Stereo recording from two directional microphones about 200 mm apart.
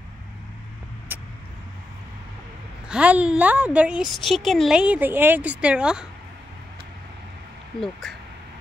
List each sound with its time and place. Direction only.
2.9 s a woman's voice: 5° right (ahead or behind)